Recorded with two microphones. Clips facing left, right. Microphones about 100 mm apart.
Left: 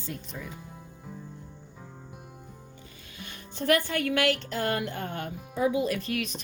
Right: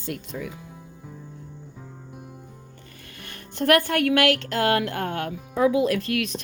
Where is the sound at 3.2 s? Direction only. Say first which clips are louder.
Right 6 dB; 60° right (ahead or behind).